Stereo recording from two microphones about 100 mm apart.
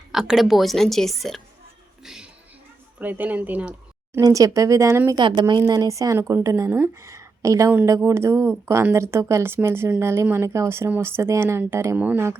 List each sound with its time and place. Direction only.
0.1 s a woman's voice: 5° right (ahead or behind)
2.0 s a sound: 5° right (ahead or behind)
3.0 s speech: 15° right (ahead or behind)
4.2 s speech: 35° right (ahead or behind)
5.1 s a woman's voice: 50° right (ahead or behind); by 11.9 s 25° right (ahead or behind)
11.9 s speech: 15° right (ahead or behind)